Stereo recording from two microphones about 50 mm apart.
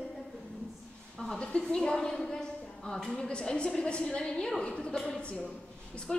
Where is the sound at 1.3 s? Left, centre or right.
Centre.